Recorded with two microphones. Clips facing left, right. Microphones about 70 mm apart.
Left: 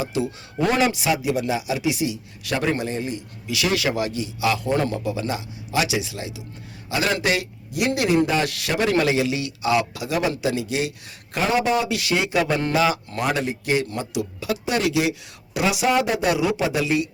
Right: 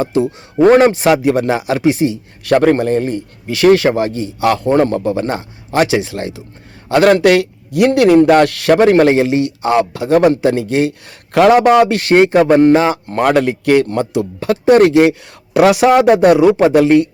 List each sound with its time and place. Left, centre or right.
0.1 s a man's voice: right
11.3 s a man's voice: right
11.9 s speech: right
13.2 s a man's voice: right